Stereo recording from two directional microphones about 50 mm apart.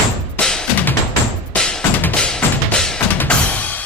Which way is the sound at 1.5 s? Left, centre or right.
Centre.